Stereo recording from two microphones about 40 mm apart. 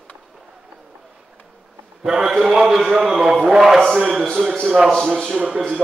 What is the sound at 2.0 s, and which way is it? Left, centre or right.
Speech, centre.